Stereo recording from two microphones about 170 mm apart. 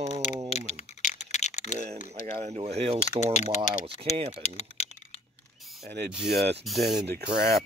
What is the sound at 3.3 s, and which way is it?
Speech, 40° left (ahead or behind).